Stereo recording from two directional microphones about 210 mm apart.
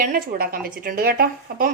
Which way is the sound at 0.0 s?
45° right (ahead or behind).